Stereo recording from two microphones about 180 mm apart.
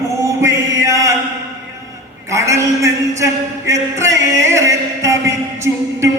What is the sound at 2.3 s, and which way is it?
A man's voice, 15° right (ahead or behind).